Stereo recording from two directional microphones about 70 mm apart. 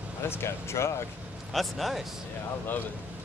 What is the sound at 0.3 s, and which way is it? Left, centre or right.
Speech, left.